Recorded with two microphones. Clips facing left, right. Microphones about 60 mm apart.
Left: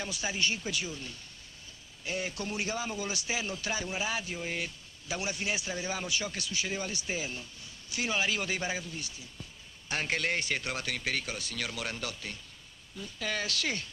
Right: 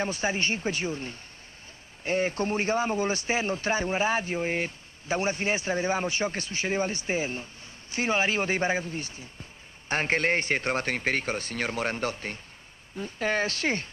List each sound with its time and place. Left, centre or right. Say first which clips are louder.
0.0 s speech: right 6 dB; right